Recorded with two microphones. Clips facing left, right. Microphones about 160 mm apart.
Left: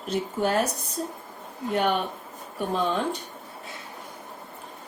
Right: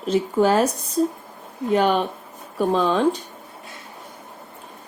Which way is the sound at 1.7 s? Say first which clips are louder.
Right 6 dB; 90° right.